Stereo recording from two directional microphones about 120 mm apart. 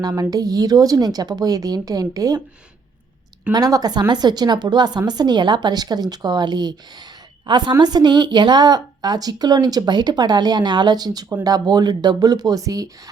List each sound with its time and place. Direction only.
0.2 s a woman's voice: 30° right (ahead or behind)
3.5 s a woman's voice: 30° right (ahead or behind)